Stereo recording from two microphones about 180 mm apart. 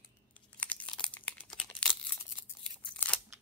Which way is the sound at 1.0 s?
5° left (ahead or behind).